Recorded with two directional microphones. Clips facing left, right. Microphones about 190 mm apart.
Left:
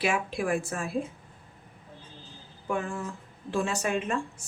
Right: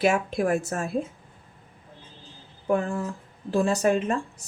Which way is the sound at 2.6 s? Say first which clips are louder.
Right 6 dB; 35° right (ahead or behind).